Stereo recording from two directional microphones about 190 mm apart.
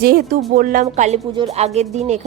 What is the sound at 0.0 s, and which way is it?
Speech, 50° right (ahead or behind).